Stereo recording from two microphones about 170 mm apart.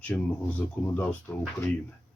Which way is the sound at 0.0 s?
5° left (ahead or behind).